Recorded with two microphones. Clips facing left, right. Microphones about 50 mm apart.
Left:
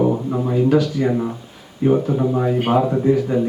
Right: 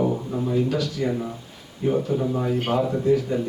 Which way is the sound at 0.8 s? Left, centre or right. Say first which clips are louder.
Left 6 dB; centre.